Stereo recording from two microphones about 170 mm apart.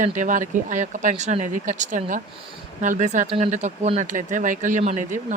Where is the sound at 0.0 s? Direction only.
50° right (ahead or behind).